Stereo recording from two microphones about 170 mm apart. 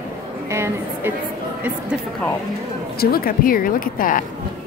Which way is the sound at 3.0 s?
60° left (ahead or behind).